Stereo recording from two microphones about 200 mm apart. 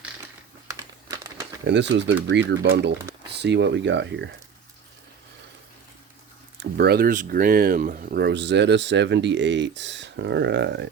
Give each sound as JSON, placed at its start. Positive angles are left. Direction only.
{"t": 0.7, "sound": "crumpling", "side_deg": -15}
{"t": 1.6, "sound": "speech", "side_deg": -60}
{"t": 6.6, "sound": "speech", "side_deg": -55}